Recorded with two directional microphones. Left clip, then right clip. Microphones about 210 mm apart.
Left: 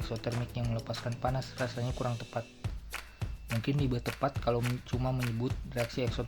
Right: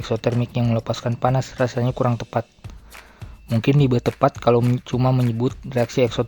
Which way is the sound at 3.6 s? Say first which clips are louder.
Right 16 dB; 55° right (ahead or behind).